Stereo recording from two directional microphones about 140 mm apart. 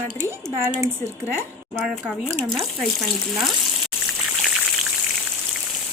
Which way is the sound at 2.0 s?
5° left (ahead or behind).